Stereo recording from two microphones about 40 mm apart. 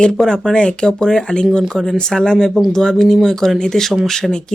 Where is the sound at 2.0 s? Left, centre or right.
Centre.